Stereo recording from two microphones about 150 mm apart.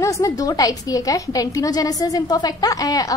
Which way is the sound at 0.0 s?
20° left (ahead or behind).